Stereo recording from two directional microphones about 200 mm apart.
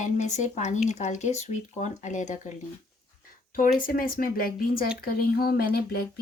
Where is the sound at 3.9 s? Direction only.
45° left (ahead or behind).